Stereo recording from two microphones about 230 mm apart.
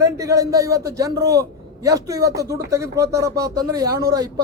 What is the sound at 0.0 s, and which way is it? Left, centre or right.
A woman's voice, centre.